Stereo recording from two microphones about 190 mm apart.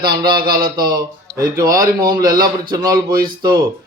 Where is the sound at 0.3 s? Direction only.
50° right (ahead or behind).